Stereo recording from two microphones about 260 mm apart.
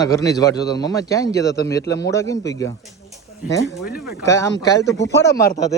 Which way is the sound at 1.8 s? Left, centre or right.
Left.